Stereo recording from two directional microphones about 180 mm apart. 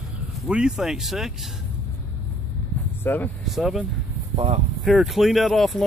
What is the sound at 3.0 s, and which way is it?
Speech, 10° left (ahead or behind).